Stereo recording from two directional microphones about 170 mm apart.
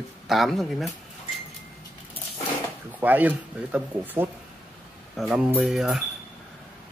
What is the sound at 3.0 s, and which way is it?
Speech, 10° right (ahead or behind).